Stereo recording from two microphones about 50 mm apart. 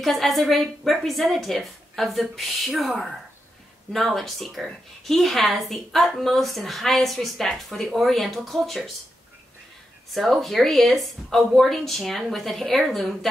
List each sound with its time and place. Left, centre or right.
0.0 s a woman's voice: centre
10.1 s a woman's voice: centre